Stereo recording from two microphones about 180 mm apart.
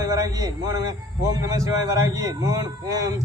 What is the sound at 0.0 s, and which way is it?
Speech, 20° right (ahead or behind).